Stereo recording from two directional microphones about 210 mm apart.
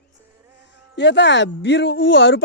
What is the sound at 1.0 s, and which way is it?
Speech, 55° left (ahead or behind).